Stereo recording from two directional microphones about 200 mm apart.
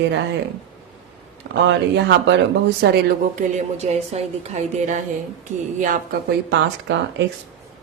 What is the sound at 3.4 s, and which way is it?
A woman's voice, 35° right (ahead or behind).